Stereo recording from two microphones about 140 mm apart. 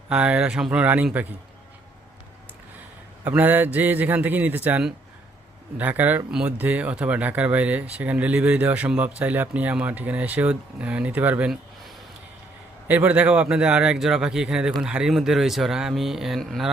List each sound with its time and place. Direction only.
0.1 s speech: 10° right (ahead or behind)
3.2 s speech: 15° right (ahead or behind)
12.9 s speech: 10° right (ahead or behind)